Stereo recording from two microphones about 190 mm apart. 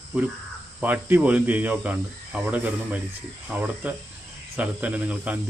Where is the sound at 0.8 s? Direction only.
10° right (ahead or behind).